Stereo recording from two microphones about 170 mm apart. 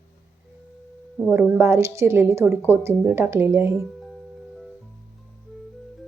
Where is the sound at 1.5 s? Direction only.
15° right (ahead or behind).